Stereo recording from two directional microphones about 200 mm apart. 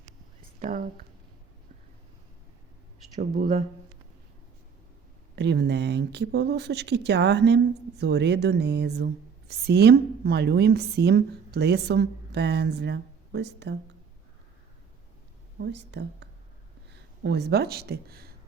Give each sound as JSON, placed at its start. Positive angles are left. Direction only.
{"t": 0.6, "sound": "speech", "side_deg": -40}
{"t": 3.3, "sound": "speech", "side_deg": -45}
{"t": 5.4, "sound": "a woman's voice", "side_deg": -60}
{"t": 15.6, "sound": "a woman's voice", "side_deg": -60}